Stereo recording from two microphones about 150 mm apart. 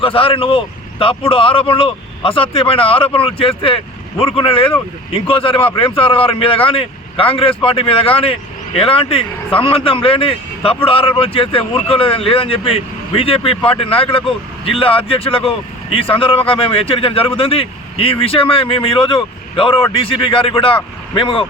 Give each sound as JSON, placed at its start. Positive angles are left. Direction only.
{"t": 0.0, "sound": "speech", "side_deg": 35}